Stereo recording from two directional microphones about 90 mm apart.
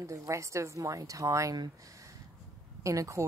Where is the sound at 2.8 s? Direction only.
35° right (ahead or behind).